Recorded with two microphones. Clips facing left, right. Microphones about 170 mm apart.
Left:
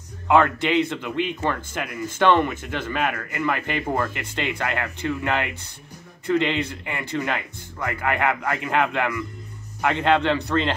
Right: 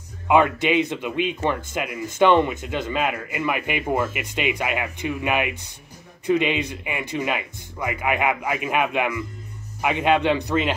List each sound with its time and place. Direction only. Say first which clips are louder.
0.3 s speech: right 1 dB; 15° right (ahead or behind)